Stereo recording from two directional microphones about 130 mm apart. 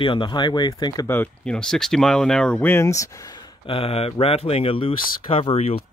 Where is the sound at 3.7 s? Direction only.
50° left (ahead or behind).